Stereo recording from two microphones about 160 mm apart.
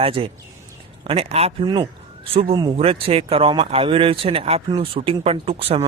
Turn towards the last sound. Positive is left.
turn(degrees=-35)  # may be behind; listen again after turning